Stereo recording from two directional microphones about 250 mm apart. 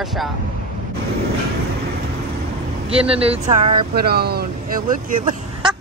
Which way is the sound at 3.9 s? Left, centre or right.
Right.